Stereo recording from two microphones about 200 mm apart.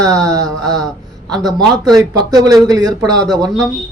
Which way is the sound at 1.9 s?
20° right (ahead or behind).